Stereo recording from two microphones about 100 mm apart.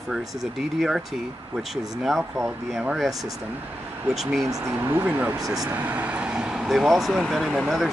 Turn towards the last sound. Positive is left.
turn(degrees=-5)  # may be behind; listen again after turning